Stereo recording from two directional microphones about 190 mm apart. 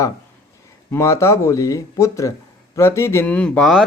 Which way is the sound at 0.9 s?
15° left (ahead or behind).